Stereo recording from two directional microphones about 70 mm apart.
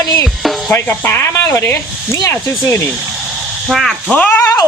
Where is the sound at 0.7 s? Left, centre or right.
Left.